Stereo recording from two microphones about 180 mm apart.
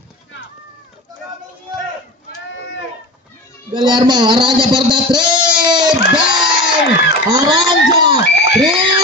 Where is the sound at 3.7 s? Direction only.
25° right (ahead or behind).